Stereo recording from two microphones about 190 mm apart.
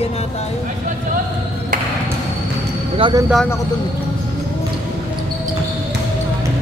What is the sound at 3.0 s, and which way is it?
Speech, 20° right (ahead or behind).